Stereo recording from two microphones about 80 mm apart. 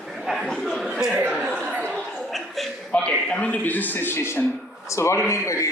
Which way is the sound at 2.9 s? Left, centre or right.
Centre.